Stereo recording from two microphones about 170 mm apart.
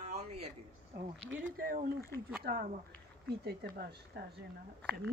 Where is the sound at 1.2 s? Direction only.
90° right; by 4.3 s 65° right (ahead or behind).